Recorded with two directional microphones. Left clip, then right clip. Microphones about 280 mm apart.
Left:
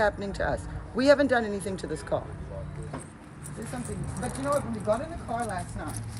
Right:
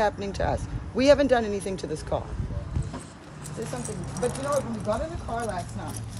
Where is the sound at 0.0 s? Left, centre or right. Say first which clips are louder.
Right 1 dB; centre.